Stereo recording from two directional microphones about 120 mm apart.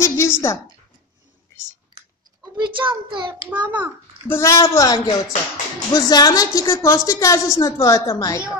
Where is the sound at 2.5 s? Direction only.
40° right (ahead or behind).